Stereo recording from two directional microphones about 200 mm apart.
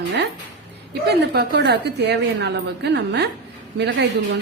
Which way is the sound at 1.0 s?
55° right (ahead or behind).